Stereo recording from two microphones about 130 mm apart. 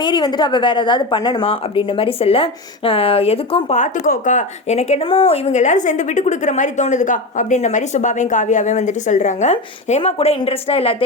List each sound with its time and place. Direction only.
0.0 s speech: 35° left (ahead or behind)
3.8 s a woman's voice: 90° left; by 10.9 s 45° left (ahead or behind)